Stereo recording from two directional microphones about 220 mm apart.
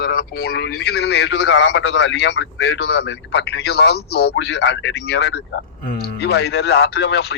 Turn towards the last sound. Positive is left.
turn(degrees=50)  # may be behind; listen again after turning